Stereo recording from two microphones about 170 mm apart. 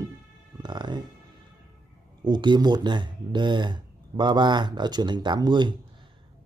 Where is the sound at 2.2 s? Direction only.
25° right (ahead or behind).